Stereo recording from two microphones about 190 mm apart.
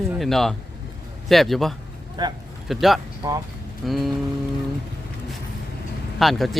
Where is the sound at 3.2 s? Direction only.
20° right (ahead or behind).